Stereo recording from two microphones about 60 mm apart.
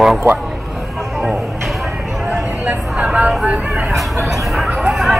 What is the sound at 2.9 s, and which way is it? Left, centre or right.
Vehicle, centre.